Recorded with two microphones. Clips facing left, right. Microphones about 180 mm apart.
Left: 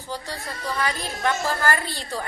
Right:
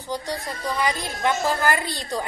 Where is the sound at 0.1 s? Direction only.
15° right (ahead or behind).